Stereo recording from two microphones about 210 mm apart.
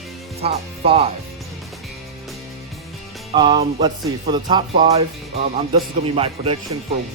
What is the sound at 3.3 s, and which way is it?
Speech, 20° right (ahead or behind).